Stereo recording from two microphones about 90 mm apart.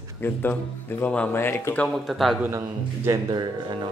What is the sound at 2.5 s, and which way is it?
Speech, 30° right (ahead or behind).